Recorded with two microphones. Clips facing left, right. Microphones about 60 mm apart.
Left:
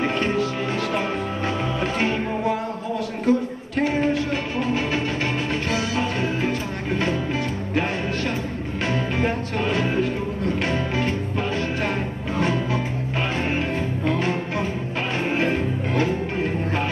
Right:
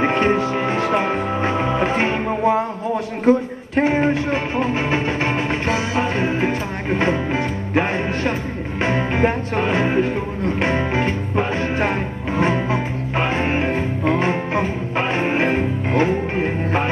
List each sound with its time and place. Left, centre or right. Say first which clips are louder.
0.0 s music: right 5 dB; right